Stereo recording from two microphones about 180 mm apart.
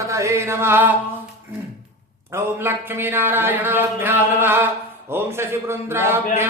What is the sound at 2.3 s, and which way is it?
Speech, 15° right (ahead or behind).